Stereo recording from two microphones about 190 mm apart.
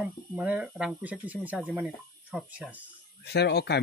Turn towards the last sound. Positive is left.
turn(degrees=60)  # may be behind; listen again after turning